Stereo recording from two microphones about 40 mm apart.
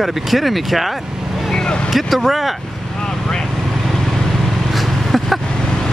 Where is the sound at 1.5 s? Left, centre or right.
Left.